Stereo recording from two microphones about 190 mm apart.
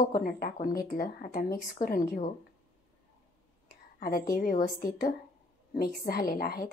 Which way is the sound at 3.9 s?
50° left (ahead or behind).